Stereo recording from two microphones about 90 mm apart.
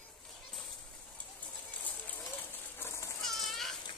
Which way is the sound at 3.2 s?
5° left (ahead or behind).